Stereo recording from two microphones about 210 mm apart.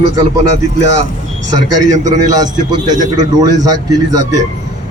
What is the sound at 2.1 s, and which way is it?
A man's voice, 15° right (ahead or behind).